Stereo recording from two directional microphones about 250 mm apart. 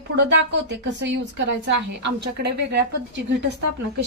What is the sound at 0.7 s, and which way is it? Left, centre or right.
A woman's voice, right.